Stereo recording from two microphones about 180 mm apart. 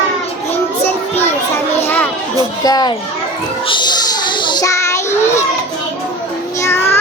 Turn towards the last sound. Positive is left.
turn(degrees=15)  # may be behind; listen again after turning